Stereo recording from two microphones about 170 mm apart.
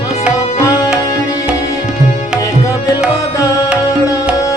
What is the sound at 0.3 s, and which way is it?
Tabla, 20° left (ahead or behind).